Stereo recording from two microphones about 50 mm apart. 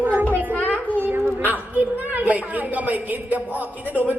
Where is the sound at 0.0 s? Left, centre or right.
Right.